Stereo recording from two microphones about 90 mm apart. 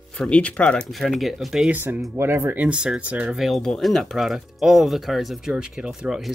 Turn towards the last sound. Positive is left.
turn(degrees=-5)  # may be behind; listen again after turning